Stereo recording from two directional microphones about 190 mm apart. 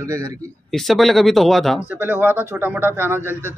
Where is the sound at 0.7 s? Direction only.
Centre (ahead or behind).